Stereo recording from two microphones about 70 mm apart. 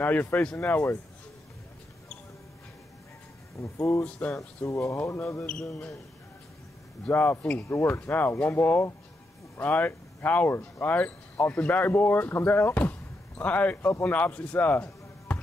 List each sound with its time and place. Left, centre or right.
0.0 s speech: left
3.5 s speech: left
4.0 s speech: left
4.6 s speech: left
5.5 s speech: centre
7.1 s speech: left
7.6 s speech: left